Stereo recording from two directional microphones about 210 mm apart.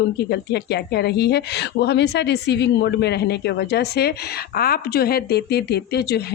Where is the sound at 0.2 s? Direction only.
50° left (ahead or behind).